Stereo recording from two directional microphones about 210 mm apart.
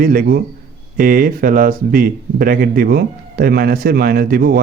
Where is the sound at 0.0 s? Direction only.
45° right (ahead or behind).